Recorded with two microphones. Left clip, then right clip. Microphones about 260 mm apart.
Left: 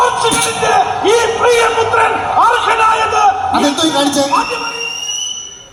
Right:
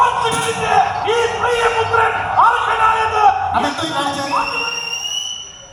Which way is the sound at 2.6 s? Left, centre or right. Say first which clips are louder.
Left 3 dB; left.